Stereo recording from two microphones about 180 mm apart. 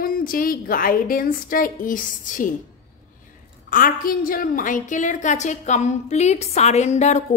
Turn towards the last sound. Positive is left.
turn(degrees=40)  # may be behind; listen again after turning